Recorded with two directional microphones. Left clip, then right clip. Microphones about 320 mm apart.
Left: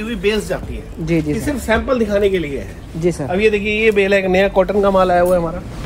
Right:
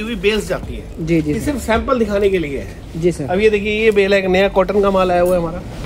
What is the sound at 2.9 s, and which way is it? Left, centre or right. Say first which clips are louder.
Speech: right 1 dB; left.